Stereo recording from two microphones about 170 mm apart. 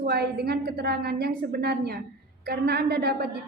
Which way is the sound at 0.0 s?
70° right (ahead or behind).